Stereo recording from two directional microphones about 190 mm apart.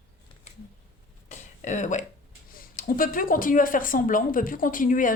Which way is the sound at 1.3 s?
40° left (ahead or behind).